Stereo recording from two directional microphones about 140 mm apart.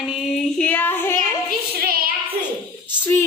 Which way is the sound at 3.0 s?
15° left (ahead or behind).